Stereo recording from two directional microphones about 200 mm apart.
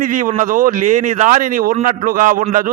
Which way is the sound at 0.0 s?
40° right (ahead or behind).